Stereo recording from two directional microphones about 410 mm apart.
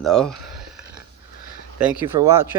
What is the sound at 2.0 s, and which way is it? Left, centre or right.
Speech, centre.